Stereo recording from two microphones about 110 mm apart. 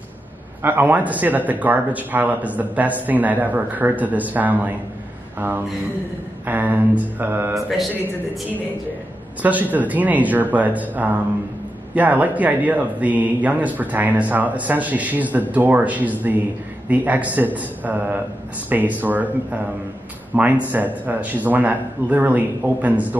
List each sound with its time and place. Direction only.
0.6 s a man's voice: 20° right (ahead or behind)
6.4 s a man's voice: 15° right (ahead or behind)
9.4 s a man's voice: 15° right (ahead or behind)